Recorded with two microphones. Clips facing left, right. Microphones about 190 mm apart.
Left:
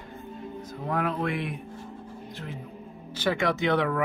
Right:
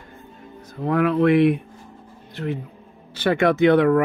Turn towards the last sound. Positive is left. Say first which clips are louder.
# right 10 dB
turn(degrees=-55)  # may be behind; listen again after turning